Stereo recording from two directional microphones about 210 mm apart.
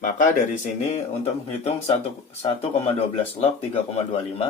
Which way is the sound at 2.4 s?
30° left (ahead or behind).